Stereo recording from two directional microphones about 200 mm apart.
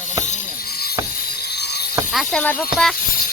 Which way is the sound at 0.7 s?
50° left (ahead or behind).